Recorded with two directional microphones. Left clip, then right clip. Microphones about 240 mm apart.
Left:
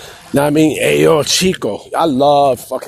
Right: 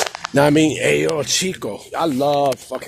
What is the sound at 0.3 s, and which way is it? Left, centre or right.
Speech, left.